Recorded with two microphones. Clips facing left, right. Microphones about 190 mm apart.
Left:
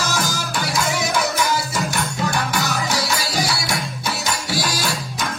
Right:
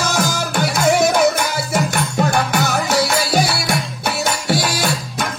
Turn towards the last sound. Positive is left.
turn(degrees=-60)  # may be behind; listen again after turning